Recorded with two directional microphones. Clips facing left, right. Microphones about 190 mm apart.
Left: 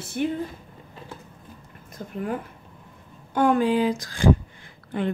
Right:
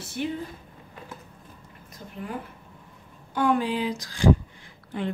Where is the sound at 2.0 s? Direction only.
50° left (ahead or behind).